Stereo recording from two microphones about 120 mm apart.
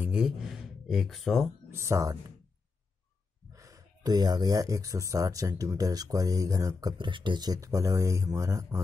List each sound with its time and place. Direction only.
0.0 s speech: 5° right (ahead or behind)
1.7 s speech: 25° right (ahead or behind)
3.5 s speech: 25° right (ahead or behind)